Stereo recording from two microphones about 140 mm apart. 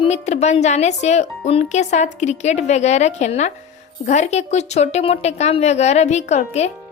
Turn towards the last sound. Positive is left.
turn(degrees=50)  # may be behind; listen again after turning